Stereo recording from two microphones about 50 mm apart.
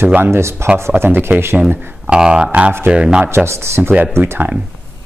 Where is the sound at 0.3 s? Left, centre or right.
Right.